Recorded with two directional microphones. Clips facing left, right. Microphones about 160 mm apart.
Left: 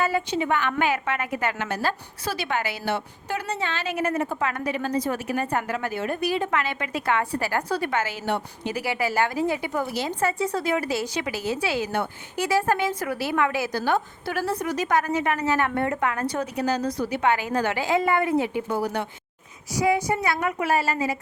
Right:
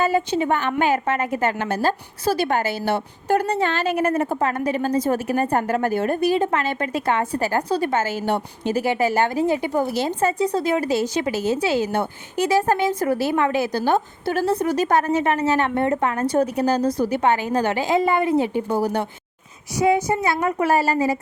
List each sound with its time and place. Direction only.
0.1 s a woman's voice: 40° right (ahead or behind)
3.3 s a woman's voice: 55° right (ahead or behind); by 7.0 s 35° right (ahead or behind)
7.0 s a woman's voice: 25° right (ahead or behind)
8.9 s a woman's voice: 25° right (ahead or behind)
10.4 s a woman's voice: 30° right (ahead or behind)
11.8 s a woman's voice: 35° right (ahead or behind)
12.4 s a woman's voice: 20° right (ahead or behind); by 17.3 s 35° right (ahead or behind)
17.3 s a woman's voice: 25° right (ahead or behind)
20.6 s a woman's voice: 40° right (ahead or behind)